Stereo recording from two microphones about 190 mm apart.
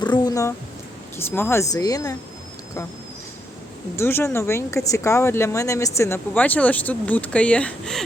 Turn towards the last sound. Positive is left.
turn(degrees=5)  # may be behind; listen again after turning